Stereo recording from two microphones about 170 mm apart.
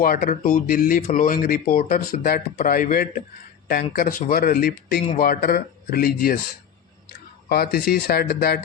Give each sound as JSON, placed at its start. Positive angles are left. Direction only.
{"t": 0.0, "sound": "speech", "side_deg": 55}
{"t": 7.4, "sound": "speech", "side_deg": 65}